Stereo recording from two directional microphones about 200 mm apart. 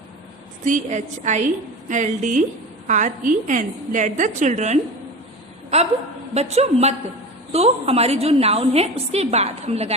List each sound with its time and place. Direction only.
0.6 s a woman's voice: 35° right (ahead or behind)